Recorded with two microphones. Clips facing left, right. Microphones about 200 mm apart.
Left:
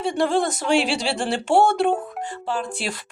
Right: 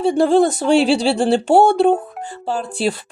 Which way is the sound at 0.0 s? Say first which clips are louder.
Right 7 dB; 35° right (ahead or behind).